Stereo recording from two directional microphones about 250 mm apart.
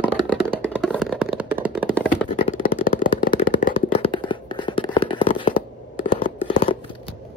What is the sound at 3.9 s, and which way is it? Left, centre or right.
Hands, centre.